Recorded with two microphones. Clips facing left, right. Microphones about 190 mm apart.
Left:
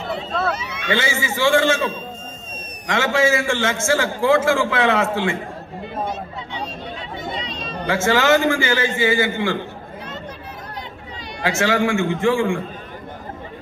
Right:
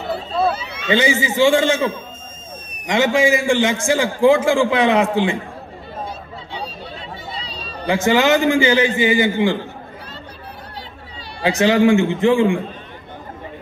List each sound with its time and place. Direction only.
0.5 s a man's voice: 20° right (ahead or behind)
7.3 s a sound: 35° right (ahead or behind)
7.8 s a man's voice: 15° right (ahead or behind)
11.4 s a man's voice: 20° right (ahead or behind)